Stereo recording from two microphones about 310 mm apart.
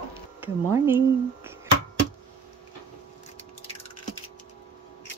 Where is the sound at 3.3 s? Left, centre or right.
Left.